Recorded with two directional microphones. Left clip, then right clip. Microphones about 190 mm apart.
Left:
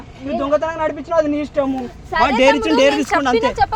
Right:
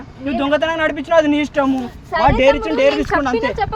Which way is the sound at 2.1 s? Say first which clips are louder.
Even; 60° left (ahead or behind).